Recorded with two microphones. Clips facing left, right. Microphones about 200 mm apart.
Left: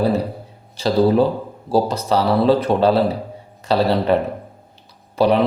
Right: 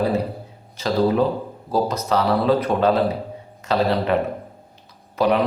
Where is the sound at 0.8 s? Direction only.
30° left (ahead or behind).